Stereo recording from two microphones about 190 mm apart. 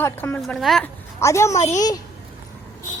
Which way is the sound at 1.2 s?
15° left (ahead or behind).